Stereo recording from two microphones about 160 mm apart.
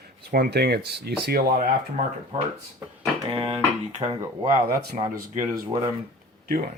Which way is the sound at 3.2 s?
35° right (ahead or behind).